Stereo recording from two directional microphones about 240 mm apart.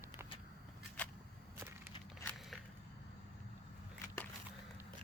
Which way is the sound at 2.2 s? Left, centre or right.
Centre.